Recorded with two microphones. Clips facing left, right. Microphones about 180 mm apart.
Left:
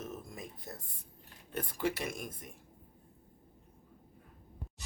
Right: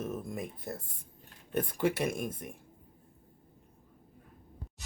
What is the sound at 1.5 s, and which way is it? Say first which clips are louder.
Speech: right 5 dB; 55° right (ahead or behind).